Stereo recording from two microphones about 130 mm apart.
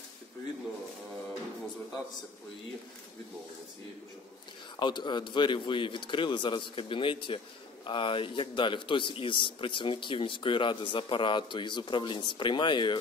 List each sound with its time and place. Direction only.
4.7 s a man's voice: 35° left (ahead or behind)